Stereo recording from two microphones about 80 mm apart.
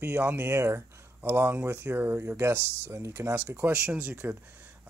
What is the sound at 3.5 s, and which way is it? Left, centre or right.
Speech, right.